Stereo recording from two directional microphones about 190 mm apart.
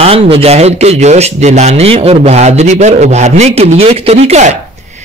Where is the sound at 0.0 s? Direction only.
30° right (ahead or behind).